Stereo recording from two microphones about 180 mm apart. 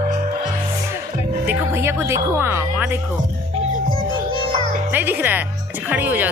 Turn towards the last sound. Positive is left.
turn(degrees=-10)  # may be behind; listen again after turning